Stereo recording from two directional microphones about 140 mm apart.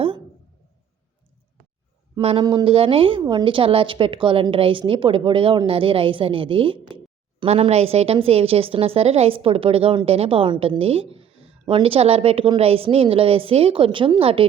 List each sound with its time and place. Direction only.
2.1 s a woman's voice: 35° right (ahead or behind)